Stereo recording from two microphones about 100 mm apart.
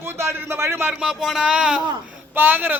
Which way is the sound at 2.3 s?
20° right (ahead or behind).